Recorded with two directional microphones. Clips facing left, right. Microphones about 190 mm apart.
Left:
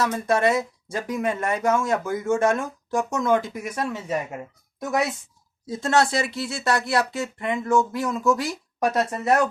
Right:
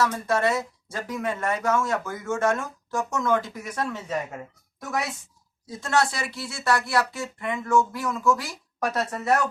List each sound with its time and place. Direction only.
0.0 s speech: 15° left (ahead or behind)
5.6 s speech: 25° left (ahead or behind)